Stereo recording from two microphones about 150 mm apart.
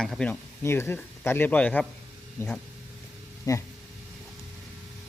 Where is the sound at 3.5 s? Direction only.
25° left (ahead or behind).